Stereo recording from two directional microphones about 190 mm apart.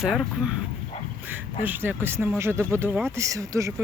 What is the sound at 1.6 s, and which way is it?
Speech, 10° right (ahead or behind).